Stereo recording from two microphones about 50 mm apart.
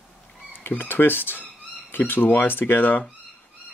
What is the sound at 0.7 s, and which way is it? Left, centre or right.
Speech, left.